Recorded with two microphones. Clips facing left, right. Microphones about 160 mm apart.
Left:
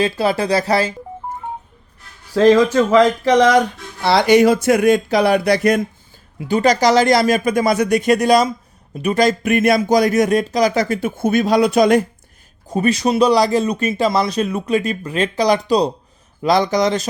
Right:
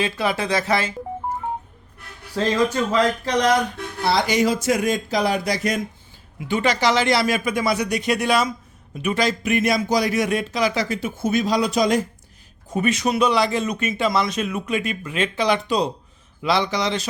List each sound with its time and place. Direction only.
0.0 s speech: 35° left (ahead or behind)
2.3 s speech: 90° left
4.0 s speech: 70° left (ahead or behind)
6.5 s speech: 40° left (ahead or behind); by 12.0 s 60° left (ahead or behind)
12.6 s speech: 35° left (ahead or behind)